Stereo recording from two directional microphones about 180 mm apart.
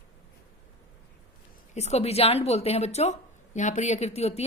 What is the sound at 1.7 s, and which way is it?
A woman's voice, 35° left (ahead or behind).